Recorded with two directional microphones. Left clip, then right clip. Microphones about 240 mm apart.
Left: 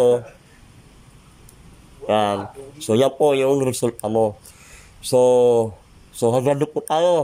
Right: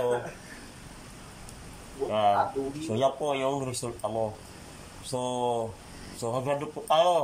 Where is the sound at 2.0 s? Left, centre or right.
Left.